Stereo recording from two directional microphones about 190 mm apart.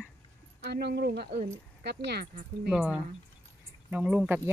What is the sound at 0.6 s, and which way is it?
Speech, 60° right (ahead or behind).